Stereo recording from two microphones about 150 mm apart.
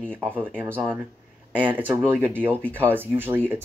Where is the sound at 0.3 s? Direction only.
10° left (ahead or behind).